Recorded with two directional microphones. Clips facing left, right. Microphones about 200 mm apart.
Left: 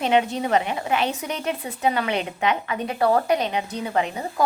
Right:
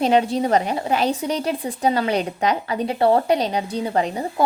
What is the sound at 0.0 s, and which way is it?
A woman's voice, 35° right (ahead or behind).